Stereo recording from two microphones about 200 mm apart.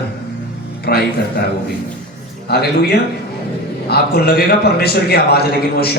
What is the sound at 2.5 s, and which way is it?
A man's voice, 55° left (ahead or behind).